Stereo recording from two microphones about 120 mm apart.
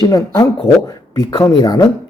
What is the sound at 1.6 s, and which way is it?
Speech, 35° left (ahead or behind).